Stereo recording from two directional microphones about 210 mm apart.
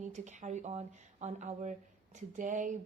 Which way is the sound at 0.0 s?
35° right (ahead or behind).